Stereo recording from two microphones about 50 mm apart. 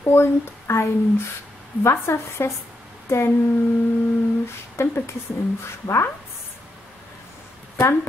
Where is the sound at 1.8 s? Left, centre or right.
Left.